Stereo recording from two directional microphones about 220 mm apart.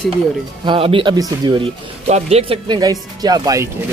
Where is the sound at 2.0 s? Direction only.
30° right (ahead or behind).